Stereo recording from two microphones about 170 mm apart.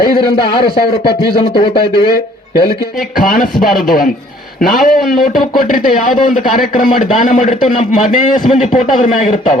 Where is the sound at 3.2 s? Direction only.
50° left (ahead or behind).